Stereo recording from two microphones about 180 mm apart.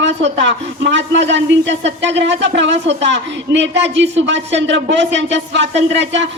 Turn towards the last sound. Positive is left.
turn(degrees=-85)